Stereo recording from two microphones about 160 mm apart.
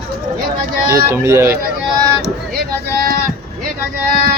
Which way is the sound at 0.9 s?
15° right (ahead or behind).